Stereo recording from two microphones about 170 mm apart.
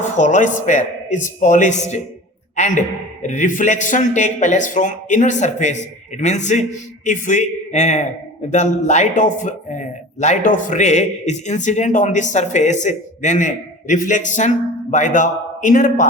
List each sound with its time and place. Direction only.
0.2 s a man's voice: 45° left (ahead or behind)